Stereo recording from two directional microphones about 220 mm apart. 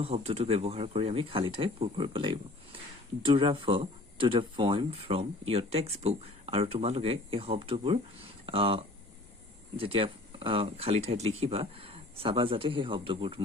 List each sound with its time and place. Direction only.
0.0 s speech: 25° right (ahead or behind)